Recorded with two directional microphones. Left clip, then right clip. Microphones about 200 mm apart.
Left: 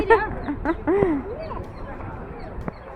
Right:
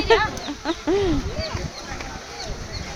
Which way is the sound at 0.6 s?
10° right (ahead or behind).